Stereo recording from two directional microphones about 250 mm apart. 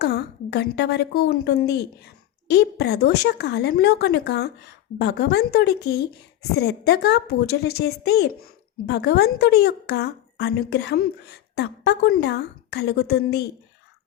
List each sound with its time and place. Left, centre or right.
0.0 s a woman's voice: left